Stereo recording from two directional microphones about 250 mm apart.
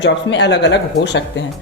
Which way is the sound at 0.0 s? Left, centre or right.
Left.